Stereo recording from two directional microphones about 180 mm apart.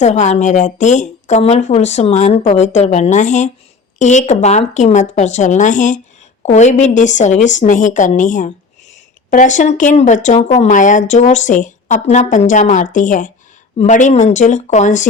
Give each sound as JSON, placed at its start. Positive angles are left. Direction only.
{"t": 0.0, "sound": "speech", "side_deg": 40}